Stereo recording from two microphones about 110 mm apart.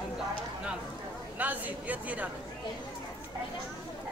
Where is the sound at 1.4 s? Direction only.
15° right (ahead or behind).